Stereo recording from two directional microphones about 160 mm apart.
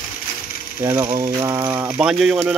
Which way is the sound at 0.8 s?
15° right (ahead or behind).